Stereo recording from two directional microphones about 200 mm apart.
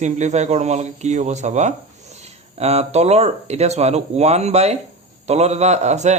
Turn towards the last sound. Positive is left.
turn(degrees=-35)  # may be behind; listen again after turning